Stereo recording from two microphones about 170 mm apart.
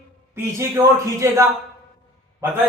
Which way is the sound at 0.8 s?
20° right (ahead or behind).